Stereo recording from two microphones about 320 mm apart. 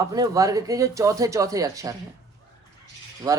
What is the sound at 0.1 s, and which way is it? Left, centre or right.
Speech, centre.